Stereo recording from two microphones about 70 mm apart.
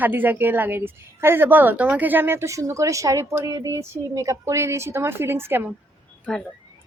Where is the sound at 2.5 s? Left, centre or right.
Right.